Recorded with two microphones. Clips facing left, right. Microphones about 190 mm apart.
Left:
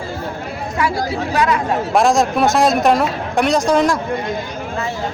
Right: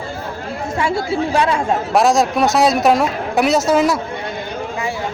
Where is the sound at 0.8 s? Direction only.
25° right (ahead or behind).